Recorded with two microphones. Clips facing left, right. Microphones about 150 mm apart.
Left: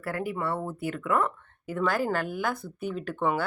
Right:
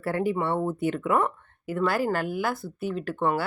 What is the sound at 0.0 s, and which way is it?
Speech, 25° right (ahead or behind).